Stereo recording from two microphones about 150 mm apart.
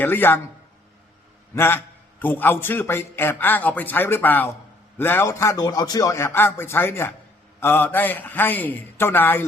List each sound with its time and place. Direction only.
0.0 s a man's voice: 15° left (ahead or behind)
1.5 s a man's voice: 15° left (ahead or behind)